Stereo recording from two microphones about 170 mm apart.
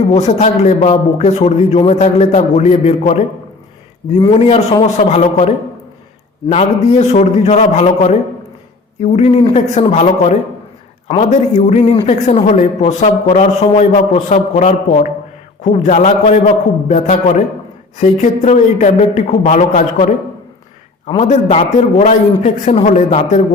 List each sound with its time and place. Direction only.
0.1 s speech: 40° left (ahead or behind)
21.2 s speech: 40° left (ahead or behind)